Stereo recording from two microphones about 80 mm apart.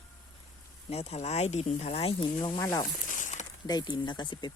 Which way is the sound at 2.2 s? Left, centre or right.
Left.